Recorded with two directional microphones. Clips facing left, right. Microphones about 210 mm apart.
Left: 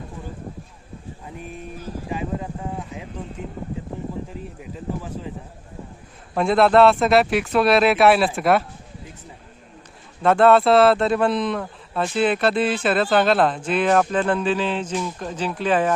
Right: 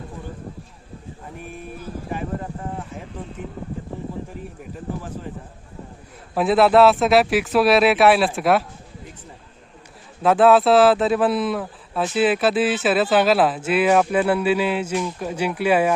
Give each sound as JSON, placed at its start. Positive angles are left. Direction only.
{"t": 6.3, "sound": "speech", "side_deg": 0}
{"t": 10.2, "sound": "speech", "side_deg": 0}